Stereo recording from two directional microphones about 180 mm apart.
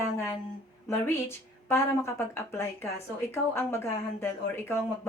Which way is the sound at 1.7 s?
15° left (ahead or behind).